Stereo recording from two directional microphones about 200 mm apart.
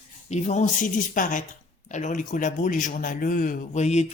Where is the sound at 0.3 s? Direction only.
35° left (ahead or behind).